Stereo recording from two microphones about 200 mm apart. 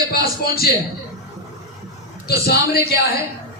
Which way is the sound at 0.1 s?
50° left (ahead or behind).